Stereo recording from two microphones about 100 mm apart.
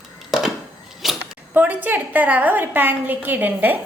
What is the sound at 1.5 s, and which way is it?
A woman's voice, 15° right (ahead or behind).